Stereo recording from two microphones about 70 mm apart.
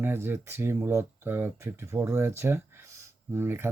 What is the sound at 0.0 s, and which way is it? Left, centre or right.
Speech, right.